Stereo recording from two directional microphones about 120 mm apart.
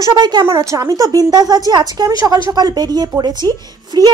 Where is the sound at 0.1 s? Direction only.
35° right (ahead or behind).